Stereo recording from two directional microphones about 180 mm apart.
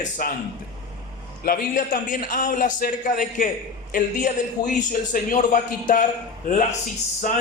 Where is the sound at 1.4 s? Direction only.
55° left (ahead or behind).